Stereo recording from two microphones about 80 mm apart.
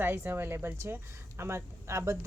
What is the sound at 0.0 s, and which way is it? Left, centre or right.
Speech, right.